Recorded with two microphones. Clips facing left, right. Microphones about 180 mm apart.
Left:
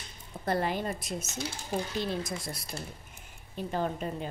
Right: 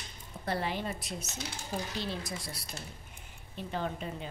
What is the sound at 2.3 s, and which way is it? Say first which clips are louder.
A woman's voice: left 4 dB; 50° left (ahead or behind).